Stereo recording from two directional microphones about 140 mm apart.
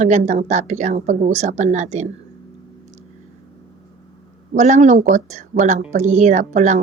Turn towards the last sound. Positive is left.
turn(degrees=-60)  # may be behind; listen again after turning